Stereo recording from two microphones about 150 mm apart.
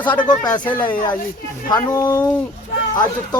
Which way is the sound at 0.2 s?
30° left (ahead or behind).